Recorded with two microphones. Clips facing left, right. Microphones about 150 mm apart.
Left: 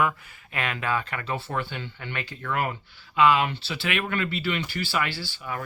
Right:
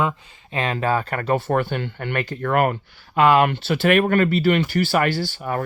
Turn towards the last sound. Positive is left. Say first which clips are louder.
# right 9 dB
turn(degrees=-50)  # may be behind; listen again after turning